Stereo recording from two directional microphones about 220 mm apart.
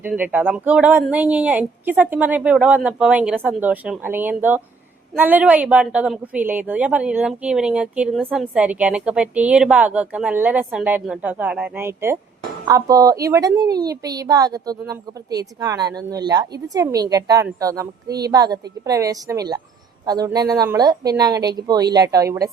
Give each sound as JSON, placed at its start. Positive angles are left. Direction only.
{"t": 0.0, "sound": "a woman's voice", "side_deg": -5}